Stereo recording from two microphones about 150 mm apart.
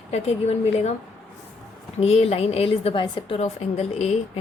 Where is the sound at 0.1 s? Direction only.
45° left (ahead or behind).